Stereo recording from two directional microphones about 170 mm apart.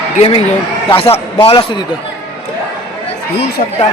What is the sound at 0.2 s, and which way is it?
A man's voice, 35° left (ahead or behind).